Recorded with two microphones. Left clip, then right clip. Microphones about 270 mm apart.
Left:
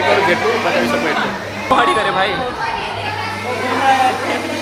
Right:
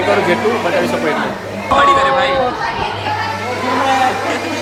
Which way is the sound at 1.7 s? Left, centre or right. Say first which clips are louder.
Right 3 dB; centre.